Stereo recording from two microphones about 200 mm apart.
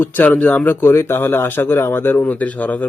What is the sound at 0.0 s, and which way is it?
Speech, 10° left (ahead or behind).